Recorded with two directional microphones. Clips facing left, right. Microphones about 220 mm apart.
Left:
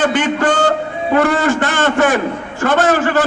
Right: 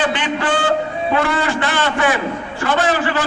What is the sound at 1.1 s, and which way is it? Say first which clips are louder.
A man's voice: left 6 dB; 45° left (ahead or behind).